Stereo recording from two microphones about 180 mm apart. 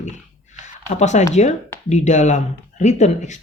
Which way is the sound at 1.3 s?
40° left (ahead or behind).